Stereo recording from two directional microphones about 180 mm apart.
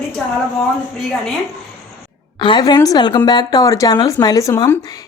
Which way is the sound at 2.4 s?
25° left (ahead or behind).